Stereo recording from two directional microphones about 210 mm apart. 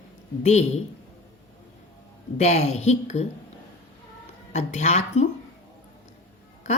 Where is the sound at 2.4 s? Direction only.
30° left (ahead or behind).